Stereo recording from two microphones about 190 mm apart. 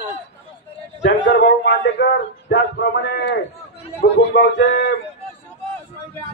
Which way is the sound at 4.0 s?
65° left (ahead or behind).